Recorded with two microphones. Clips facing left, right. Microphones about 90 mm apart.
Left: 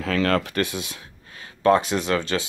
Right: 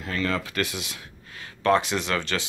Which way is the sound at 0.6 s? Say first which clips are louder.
Left 3 dB; 25° left (ahead or behind).